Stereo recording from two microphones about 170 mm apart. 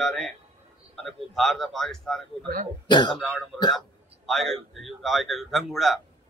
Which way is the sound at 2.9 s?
25° left (ahead or behind).